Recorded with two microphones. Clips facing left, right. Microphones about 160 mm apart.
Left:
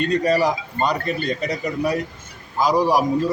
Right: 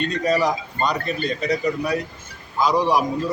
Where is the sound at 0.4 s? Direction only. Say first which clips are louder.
Left 1 dB; 10° left (ahead or behind).